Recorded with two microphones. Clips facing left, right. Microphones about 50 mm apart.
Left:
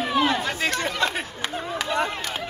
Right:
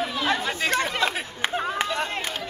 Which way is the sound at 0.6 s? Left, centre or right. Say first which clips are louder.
Right 2 dB; centre.